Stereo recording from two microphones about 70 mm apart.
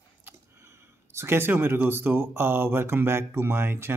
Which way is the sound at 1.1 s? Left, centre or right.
Right.